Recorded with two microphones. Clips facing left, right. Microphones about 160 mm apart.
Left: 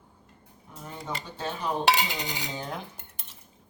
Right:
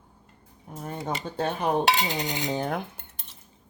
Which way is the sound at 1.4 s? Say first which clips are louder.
Right 4 dB; 60° right (ahead or behind).